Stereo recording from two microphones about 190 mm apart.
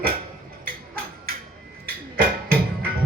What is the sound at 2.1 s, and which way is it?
Music, 50° right (ahead or behind).